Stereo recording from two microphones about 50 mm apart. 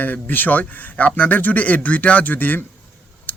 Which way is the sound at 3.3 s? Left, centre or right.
Left.